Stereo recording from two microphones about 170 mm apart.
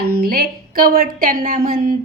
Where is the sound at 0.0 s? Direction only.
65° right (ahead or behind).